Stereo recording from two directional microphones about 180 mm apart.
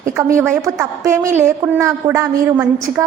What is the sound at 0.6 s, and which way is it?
A woman's voice, 20° right (ahead or behind).